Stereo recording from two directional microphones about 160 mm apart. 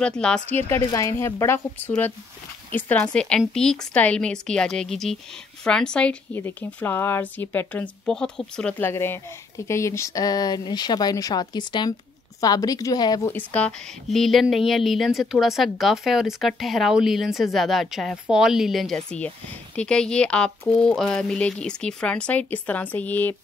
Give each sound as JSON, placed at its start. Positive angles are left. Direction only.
{"t": 0.0, "sound": "a woman's voice", "side_deg": 5}
{"t": 13.3, "sound": "a woman's voice", "side_deg": 10}